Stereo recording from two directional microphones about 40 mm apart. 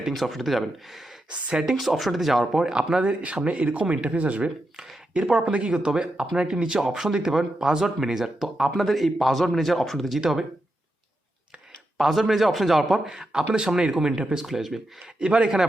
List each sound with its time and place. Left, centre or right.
0.0 s speech: centre
1.3 s speech: centre
1.8 s speech: centre
2.7 s speech: right
5.7 s speech: centre
10.2 s speech: centre
11.9 s a man's voice: centre
13.1 s speech: centre